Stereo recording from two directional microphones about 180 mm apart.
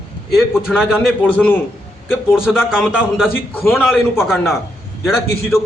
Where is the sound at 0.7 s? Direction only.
5° right (ahead or behind).